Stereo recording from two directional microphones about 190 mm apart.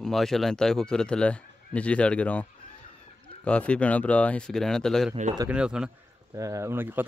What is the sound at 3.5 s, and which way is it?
Speech, 5° left (ahead or behind).